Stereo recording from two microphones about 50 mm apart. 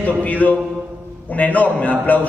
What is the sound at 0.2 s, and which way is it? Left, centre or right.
A man's voice, left.